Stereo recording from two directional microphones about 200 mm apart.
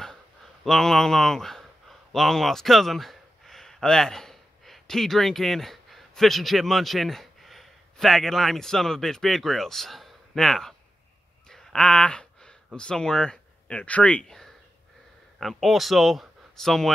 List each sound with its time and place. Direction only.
0.7 s speech: centre (ahead or behind)